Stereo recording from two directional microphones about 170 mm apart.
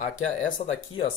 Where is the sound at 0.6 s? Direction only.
45° left (ahead or behind).